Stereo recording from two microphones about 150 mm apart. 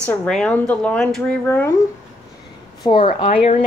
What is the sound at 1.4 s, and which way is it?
Speech, 15° left (ahead or behind).